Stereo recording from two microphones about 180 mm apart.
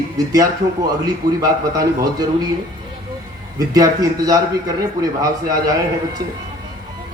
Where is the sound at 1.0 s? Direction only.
20° right (ahead or behind).